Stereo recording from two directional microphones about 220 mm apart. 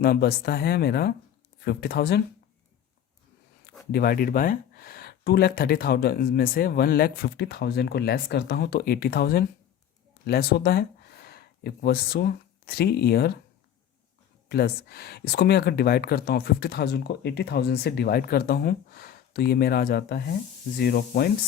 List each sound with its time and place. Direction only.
0.0 s speech: 45° left (ahead or behind)
3.9 s speech: 40° left (ahead or behind)
14.5 s speech: 45° left (ahead or behind)